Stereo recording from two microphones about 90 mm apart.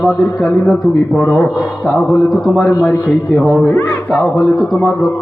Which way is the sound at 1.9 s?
Centre (ahead or behind).